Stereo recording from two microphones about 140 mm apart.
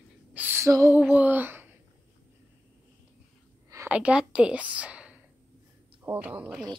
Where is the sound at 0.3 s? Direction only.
15° right (ahead or behind).